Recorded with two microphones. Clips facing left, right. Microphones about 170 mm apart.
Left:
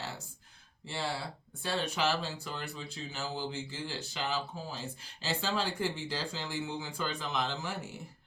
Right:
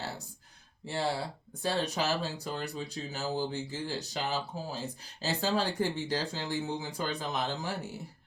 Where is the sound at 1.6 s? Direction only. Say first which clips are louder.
Right 2 dB; 40° right (ahead or behind).